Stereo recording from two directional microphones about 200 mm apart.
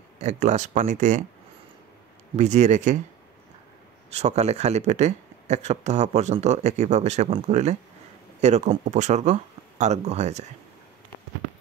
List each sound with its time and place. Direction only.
0.2 s speech: 35° right (ahead or behind)
2.3 s speech: 35° right (ahead or behind)
4.1 s speech: 35° right (ahead or behind)